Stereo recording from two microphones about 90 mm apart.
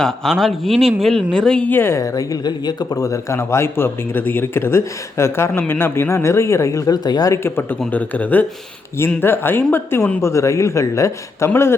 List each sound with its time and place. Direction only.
0.0 s speech: 5° left (ahead or behind)
1.7 s speech: 25° left (ahead or behind)
2.0 s a man's voice: 40° left (ahead or behind)
7.4 s a man's voice: 25° left (ahead or behind)